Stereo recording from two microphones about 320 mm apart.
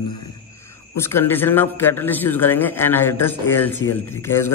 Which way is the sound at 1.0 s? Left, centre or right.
Centre.